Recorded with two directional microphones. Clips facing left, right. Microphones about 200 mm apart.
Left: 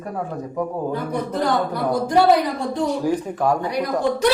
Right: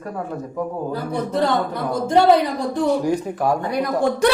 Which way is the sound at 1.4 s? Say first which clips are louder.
Right 1 dB; 25° right (ahead or behind).